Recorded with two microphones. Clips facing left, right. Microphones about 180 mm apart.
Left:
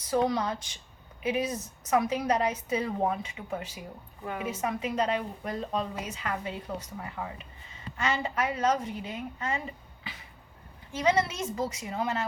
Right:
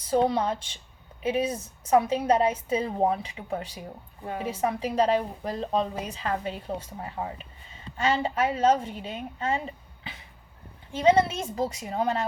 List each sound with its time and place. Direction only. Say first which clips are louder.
0.1 s a woman's voice: right 3 dB; 30° right (ahead or behind)
10.9 s a woman's voice: right 5 dB; 30° right (ahead or behind)